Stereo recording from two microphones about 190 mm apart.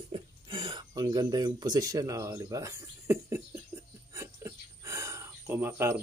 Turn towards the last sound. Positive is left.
turn(degrees=-10)  # may be behind; listen again after turning